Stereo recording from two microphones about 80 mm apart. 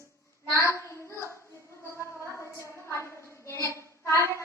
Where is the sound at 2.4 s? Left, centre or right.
Left.